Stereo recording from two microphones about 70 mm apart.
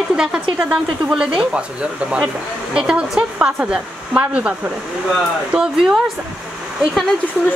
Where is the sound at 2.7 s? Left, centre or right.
Centre.